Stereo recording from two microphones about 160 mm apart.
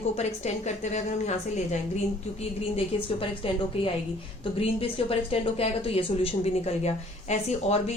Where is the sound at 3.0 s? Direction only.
35° left (ahead or behind).